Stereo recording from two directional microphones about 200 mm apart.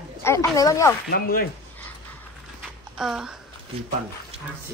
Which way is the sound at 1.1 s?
50° left (ahead or behind).